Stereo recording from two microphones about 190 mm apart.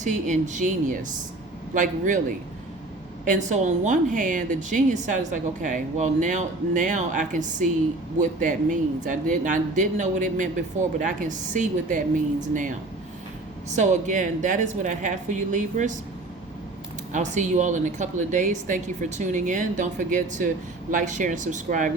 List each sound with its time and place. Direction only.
0.0 s a woman's voice: 40° right (ahead or behind)
3.2 s a woman's voice: 40° right (ahead or behind)
17.1 s a woman's voice: 40° right (ahead or behind)